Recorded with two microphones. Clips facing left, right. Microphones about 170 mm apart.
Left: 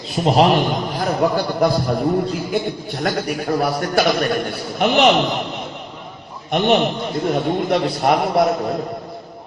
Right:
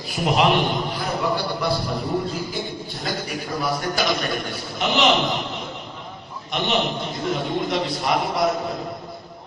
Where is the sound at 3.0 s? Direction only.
60° left (ahead or behind).